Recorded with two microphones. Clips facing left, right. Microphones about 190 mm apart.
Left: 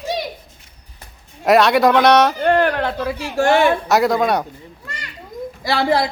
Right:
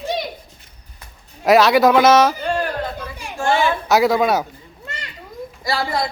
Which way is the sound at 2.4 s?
65° left (ahead or behind).